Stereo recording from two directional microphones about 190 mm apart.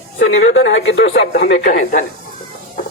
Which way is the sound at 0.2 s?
85° left.